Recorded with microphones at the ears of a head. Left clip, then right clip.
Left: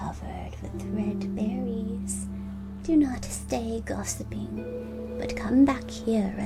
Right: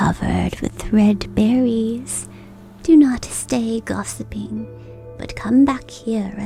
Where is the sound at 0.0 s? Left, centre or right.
Right.